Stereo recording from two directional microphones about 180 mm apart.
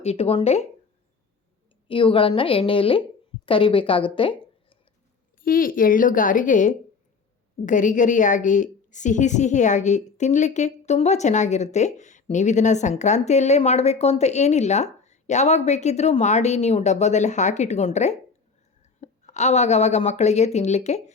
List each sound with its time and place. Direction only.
0.0 s a woman's voice: 35° left (ahead or behind)
1.9 s a woman's voice: 30° left (ahead or behind)
5.4 s a woman's voice: 50° left (ahead or behind)